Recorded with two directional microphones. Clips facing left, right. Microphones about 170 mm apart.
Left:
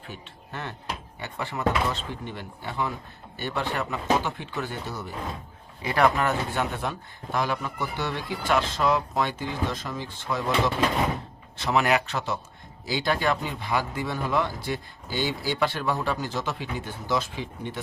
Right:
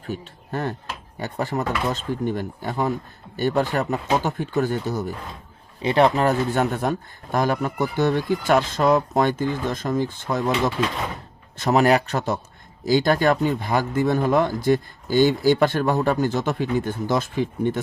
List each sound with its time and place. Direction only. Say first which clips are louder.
0.0 s speech: right 10 dB; 40° right (ahead or behind)
5.8 s speech: right 5 dB; 25° right (ahead or behind)
6.2 s speech: right 6 dB; 45° right (ahead or behind)
11.5 s speech: right 6 dB; 45° right (ahead or behind)